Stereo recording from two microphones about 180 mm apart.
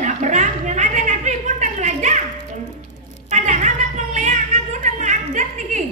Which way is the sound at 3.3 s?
40° right (ahead or behind).